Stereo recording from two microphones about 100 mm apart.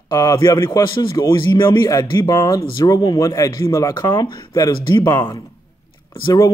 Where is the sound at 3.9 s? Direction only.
45° left (ahead or behind).